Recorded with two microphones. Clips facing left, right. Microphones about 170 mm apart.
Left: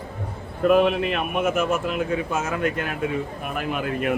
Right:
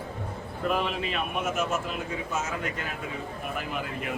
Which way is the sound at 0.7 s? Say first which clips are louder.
Left 10 dB; 60° left (ahead or behind).